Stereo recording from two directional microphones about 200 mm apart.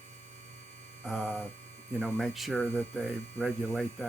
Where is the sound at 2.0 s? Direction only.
5° right (ahead or behind).